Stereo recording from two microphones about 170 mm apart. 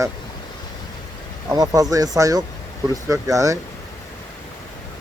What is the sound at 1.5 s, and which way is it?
Speech, 20° right (ahead or behind).